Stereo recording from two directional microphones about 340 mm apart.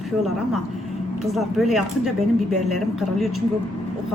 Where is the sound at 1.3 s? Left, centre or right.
Centre.